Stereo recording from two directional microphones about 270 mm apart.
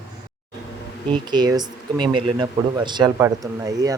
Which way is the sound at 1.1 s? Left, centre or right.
Centre.